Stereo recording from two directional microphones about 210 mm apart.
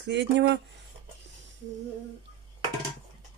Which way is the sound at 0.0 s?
55° right (ahead or behind).